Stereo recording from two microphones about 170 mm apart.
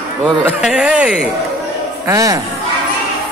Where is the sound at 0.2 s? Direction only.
10° right (ahead or behind).